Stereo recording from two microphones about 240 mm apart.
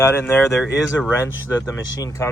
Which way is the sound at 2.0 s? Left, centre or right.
Centre.